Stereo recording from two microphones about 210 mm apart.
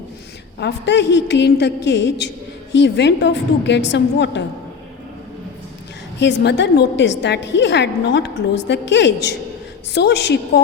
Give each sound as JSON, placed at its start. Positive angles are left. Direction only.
{"t": 0.6, "sound": "a woman's voice", "side_deg": 55}
{"t": 6.1, "sound": "a woman's voice", "side_deg": 55}